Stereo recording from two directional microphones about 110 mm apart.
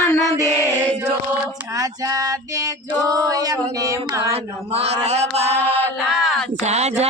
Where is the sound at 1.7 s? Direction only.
35° right (ahead or behind).